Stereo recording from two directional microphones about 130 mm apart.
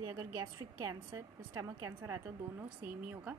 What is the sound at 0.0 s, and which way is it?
Speech, 25° right (ahead or behind).